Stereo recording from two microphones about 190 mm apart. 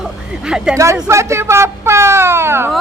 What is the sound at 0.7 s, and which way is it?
Speech, 15° right (ahead or behind).